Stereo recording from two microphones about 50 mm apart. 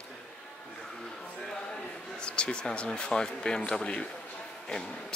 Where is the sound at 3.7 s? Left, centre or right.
Centre.